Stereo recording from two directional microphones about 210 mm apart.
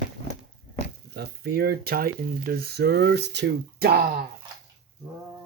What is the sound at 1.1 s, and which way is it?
Speech, 50° right (ahead or behind).